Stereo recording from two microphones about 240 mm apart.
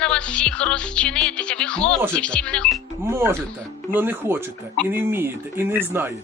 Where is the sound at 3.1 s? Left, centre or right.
Centre.